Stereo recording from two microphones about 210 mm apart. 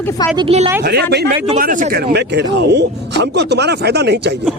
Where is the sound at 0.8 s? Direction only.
50° right (ahead or behind).